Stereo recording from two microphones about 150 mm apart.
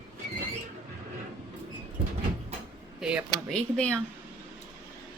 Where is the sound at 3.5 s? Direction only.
5° left (ahead or behind).